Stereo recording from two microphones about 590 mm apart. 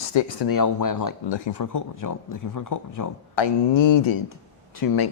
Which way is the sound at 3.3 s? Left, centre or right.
Left.